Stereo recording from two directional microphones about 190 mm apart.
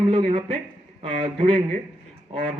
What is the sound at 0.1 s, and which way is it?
A man's voice, 30° right (ahead or behind).